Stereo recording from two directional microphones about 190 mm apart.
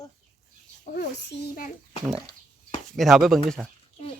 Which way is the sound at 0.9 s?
60° left (ahead or behind).